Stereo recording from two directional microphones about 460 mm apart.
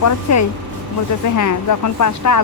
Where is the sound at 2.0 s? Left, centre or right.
Left.